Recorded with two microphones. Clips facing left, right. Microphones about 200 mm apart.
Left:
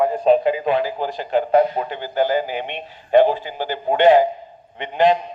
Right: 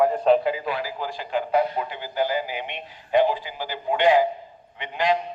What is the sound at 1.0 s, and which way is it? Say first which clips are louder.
A man's voice: left 6 dB; 50° left (ahead or behind).